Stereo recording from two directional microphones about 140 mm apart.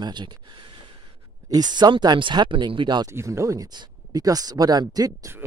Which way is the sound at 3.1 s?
20° right (ahead or behind).